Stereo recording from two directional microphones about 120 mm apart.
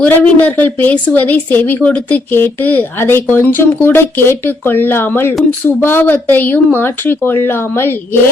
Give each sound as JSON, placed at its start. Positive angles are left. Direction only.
{"t": 0.0, "sound": "a woman's voice", "side_deg": 15}